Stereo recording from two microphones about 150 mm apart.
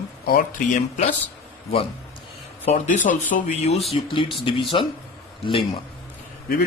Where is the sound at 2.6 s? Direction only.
50° left (ahead or behind).